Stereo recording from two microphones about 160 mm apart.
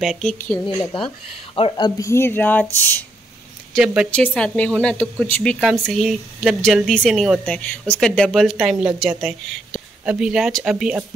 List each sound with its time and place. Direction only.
0.0 s speech: centre (ahead or behind)
0.7 s speech: 30° left (ahead or behind); by 3.1 s 10° left (ahead or behind)
3.7 s speech: 5° right (ahead or behind)
4.4 s speech: 10° left (ahead or behind)